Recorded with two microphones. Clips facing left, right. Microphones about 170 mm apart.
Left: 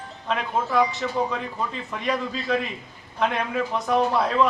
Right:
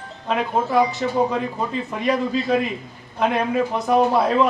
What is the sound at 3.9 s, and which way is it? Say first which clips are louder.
Speech: right 4 dB; 10° right (ahead or behind).